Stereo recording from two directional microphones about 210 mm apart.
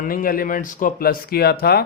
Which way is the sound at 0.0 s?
40° left (ahead or behind).